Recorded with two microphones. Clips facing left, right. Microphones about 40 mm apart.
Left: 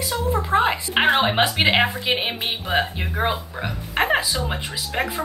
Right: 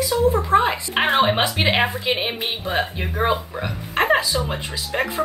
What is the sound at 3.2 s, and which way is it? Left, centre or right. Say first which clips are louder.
Speech: right 3 dB; centre.